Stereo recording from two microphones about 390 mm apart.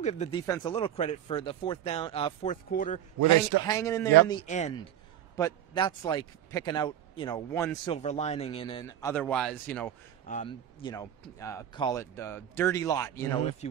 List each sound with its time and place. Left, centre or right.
0.0 s speech: centre
3.2 s a man's voice: right
3.6 s speech: centre
10.2 s speech: centre